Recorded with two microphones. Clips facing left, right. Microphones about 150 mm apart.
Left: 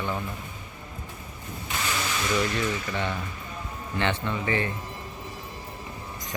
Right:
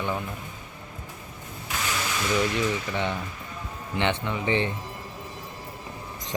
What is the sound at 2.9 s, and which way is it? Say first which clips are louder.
Speech: right 1 dB; 15° right (ahead or behind).